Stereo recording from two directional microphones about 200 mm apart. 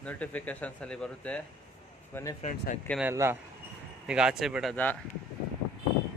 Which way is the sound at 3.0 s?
10° right (ahead or behind).